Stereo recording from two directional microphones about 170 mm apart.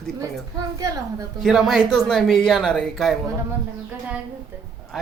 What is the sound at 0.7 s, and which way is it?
Speech, 20° right (ahead or behind).